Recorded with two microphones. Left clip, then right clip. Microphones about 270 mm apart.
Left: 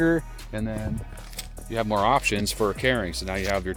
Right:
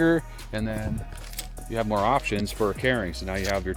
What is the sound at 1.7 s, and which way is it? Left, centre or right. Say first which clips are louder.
Speech: left 2 dB; centre.